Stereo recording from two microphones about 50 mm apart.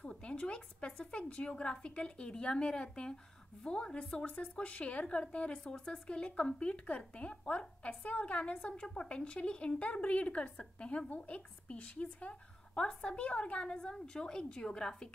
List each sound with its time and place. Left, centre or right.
0.2 s a woman's voice: left